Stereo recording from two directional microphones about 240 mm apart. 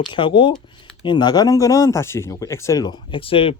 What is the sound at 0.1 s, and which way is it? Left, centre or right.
Speech, centre.